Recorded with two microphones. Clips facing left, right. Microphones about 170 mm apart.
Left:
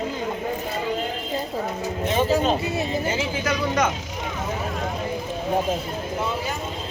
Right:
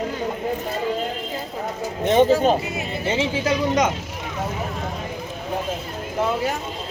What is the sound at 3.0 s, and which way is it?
Speech, 30° right (ahead or behind).